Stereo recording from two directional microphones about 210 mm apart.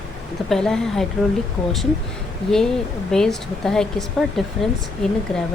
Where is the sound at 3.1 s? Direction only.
Centre (ahead or behind).